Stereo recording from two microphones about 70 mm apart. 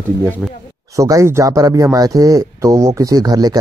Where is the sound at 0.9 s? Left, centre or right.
Right.